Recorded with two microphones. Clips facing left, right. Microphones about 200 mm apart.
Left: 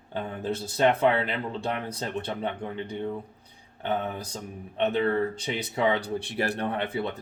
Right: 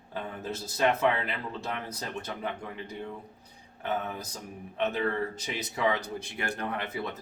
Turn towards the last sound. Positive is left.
turn(degrees=30)  # may be behind; listen again after turning